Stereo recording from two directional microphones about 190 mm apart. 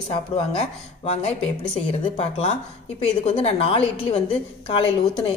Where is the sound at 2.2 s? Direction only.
35° left (ahead or behind).